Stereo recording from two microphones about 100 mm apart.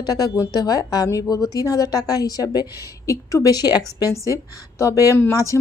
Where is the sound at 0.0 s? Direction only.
40° left (ahead or behind).